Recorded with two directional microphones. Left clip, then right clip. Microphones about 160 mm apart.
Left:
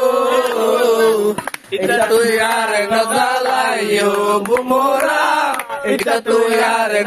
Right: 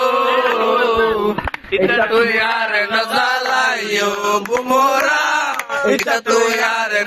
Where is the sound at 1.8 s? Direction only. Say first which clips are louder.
Left 1 dB; 50° left (ahead or behind).